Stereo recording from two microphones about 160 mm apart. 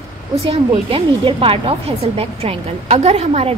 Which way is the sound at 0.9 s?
35° right (ahead or behind).